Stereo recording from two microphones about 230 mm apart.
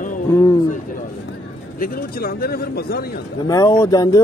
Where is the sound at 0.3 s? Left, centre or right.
Centre.